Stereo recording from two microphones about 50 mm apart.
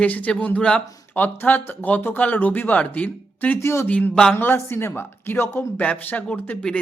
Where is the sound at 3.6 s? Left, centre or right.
Left.